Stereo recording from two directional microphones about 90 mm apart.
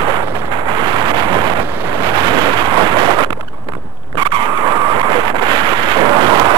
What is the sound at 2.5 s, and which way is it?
Gunshot, 55° right (ahead or behind).